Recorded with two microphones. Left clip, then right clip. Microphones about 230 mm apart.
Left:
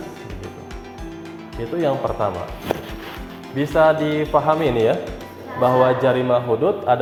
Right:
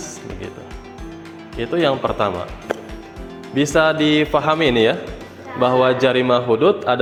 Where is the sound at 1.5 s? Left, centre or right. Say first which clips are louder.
Right 3 dB; right.